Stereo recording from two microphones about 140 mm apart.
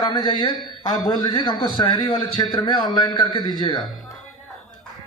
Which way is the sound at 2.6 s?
30° left (ahead or behind).